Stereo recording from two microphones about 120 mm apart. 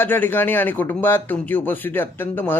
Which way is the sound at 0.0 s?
15° left (ahead or behind).